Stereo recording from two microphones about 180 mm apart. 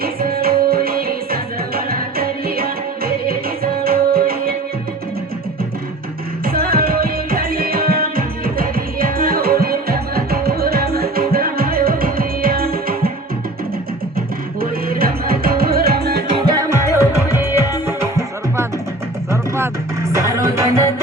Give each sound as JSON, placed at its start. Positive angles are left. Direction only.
{"t": 0.0, "sound": "music", "side_deg": -55}
{"t": 6.4, "sound": "music", "side_deg": -55}
{"t": 14.2, "sound": "music", "side_deg": -55}
{"t": 16.6, "sound": "music", "side_deg": -15}